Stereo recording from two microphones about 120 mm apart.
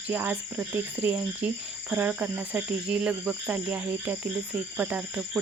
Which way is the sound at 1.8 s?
15° right (ahead or behind).